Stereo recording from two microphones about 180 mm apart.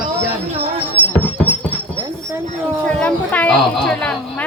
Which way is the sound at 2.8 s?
5° left (ahead or behind).